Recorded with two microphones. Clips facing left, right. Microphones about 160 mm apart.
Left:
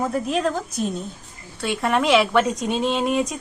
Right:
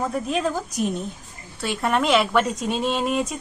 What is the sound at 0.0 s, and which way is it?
Speech, centre (ahead or behind).